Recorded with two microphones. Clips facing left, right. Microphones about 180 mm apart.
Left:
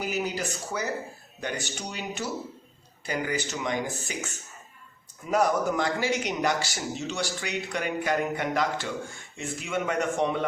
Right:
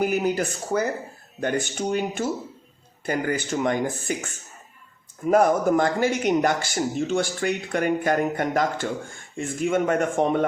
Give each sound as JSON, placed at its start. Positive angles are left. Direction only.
{"t": 0.0, "sound": "speech", "side_deg": -50}